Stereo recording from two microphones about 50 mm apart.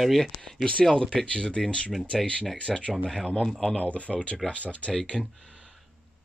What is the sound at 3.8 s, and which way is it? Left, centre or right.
Speech, left.